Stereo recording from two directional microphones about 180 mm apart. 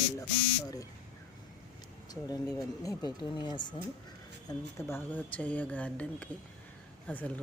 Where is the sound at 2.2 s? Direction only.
20° left (ahead or behind).